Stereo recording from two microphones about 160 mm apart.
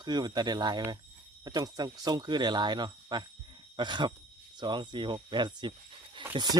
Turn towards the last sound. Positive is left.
turn(degrees=-25)  # may be behind; listen again after turning